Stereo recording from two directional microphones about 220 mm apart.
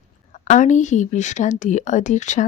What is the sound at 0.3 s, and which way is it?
Speech, 35° left (ahead or behind).